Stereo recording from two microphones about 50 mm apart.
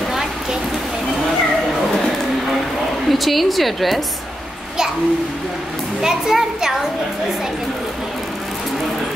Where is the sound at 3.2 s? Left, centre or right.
Centre.